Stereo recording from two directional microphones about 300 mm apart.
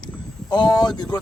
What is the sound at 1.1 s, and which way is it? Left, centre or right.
Speech, centre.